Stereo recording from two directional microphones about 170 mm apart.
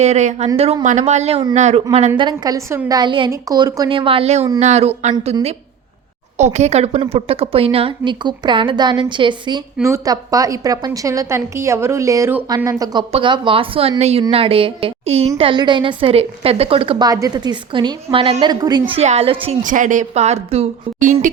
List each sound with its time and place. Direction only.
0.0 s a woman's voice: 40° right (ahead or behind); by 18.8 s 25° right (ahead or behind)
18.9 s a woman's voice: 40° right (ahead or behind)
19.6 s a woman's voice: 50° right (ahead or behind)